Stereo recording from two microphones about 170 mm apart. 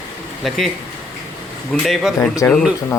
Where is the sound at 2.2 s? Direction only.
15° left (ahead or behind).